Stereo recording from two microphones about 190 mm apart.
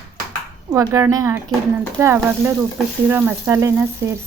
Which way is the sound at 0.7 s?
15° right (ahead or behind).